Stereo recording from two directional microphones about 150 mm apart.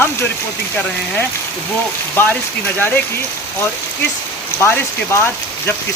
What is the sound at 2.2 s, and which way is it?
Speech, 15° left (ahead or behind).